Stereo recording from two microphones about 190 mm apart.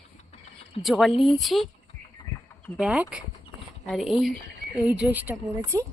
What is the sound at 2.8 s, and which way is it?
A woman's voice, 5° right (ahead or behind).